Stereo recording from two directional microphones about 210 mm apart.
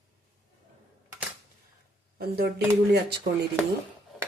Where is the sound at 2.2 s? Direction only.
50° right (ahead or behind).